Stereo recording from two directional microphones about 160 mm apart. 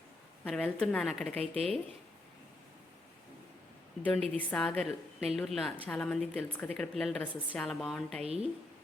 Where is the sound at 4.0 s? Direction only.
10° left (ahead or behind).